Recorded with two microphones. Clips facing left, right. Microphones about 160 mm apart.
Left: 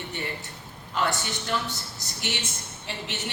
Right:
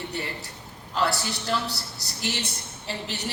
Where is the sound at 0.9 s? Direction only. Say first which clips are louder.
Right 2 dB; 35° right (ahead or behind).